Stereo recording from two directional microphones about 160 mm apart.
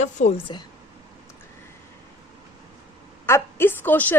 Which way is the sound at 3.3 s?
15° left (ahead or behind).